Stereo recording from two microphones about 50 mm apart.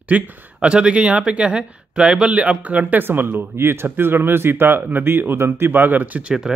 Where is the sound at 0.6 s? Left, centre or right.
Centre.